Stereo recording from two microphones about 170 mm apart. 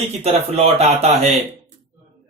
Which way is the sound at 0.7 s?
40° right (ahead or behind).